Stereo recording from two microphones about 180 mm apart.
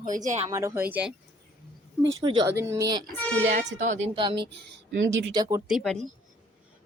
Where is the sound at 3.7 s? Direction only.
40° right (ahead or behind).